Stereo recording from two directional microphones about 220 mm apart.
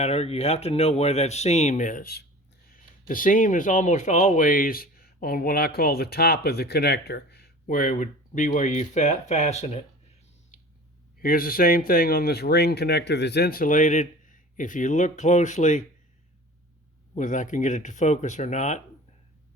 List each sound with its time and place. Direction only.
0.0 s speech: 30° left (ahead or behind)
11.2 s speech: 40° left (ahead or behind)
17.2 s speech: 35° left (ahead or behind)